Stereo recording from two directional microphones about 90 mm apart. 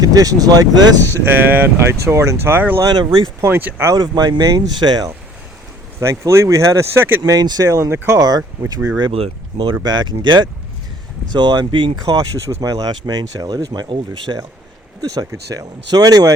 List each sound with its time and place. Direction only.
0.0 s speech: 40° right (ahead or behind)
0.9 s speech: 25° left (ahead or behind)
1.2 s speech: 25° right (ahead or behind)
2.8 s speech: 50° right (ahead or behind)
3.4 s speech: 20° right (ahead or behind)
3.8 s speech: 45° right (ahead or behind)
6.0 s speech: 30° right (ahead or behind)
7.3 s speech: 45° right (ahead or behind)
9.1 s speech: 90° right
9.8 s speech: 55° right (ahead or behind)
12.1 s speech: 45° right (ahead or behind)